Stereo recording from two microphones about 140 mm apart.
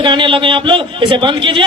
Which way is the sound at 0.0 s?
35° right (ahead or behind).